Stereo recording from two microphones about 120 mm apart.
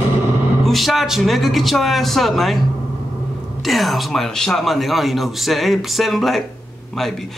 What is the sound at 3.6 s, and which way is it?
Speech, centre (ahead or behind).